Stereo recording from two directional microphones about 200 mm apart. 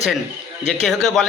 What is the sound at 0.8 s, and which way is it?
Speech, centre (ahead or behind).